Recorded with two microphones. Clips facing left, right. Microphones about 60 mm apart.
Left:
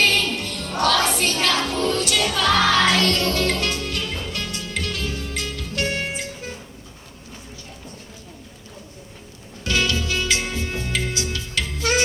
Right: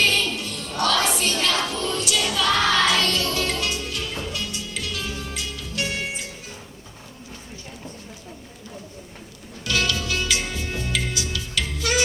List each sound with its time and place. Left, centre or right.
0.0 s music: left
9.6 s music: left